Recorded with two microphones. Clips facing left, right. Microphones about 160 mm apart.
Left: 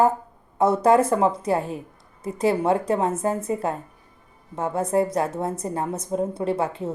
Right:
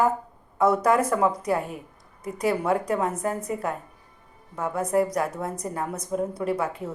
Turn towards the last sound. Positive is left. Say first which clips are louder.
# left 2 dB
turn(degrees=30)  # may be behind; listen again after turning